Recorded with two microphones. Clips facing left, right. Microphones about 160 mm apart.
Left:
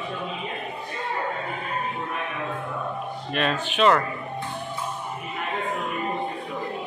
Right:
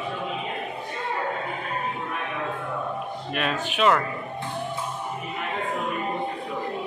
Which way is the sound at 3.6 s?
5° right (ahead or behind).